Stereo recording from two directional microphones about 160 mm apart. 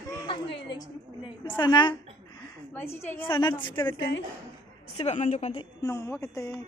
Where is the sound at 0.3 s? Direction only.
30° left (ahead or behind).